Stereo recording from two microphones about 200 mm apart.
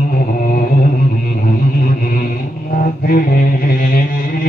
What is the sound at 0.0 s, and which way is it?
Music, 45° left (ahead or behind).